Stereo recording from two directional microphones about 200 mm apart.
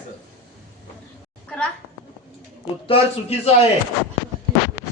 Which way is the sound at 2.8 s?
30° left (ahead or behind).